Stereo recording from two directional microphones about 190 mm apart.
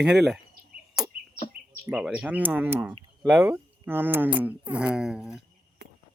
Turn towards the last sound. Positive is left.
turn(degrees=-5)  # may be behind; listen again after turning